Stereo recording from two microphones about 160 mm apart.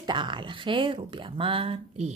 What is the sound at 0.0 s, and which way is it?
Speech, 30° right (ahead or behind).